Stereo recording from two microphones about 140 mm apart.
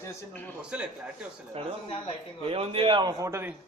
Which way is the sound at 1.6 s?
45° right (ahead or behind).